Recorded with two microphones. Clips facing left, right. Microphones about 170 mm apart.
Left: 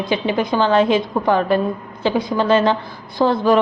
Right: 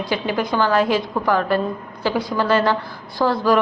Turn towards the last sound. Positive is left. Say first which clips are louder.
# left 3 dB
turn(degrees=20)  # may be behind; listen again after turning